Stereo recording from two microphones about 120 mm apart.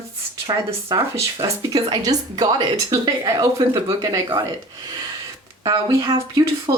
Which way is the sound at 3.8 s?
25° right (ahead or behind).